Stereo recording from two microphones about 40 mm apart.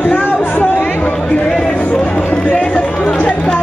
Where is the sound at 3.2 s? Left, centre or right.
Left.